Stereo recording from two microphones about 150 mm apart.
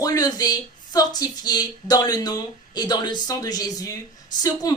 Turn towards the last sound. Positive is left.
turn(degrees=25)  # may be behind; listen again after turning